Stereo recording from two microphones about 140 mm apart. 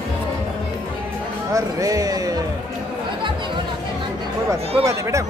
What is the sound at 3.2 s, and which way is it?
Chatter, 35° right (ahead or behind).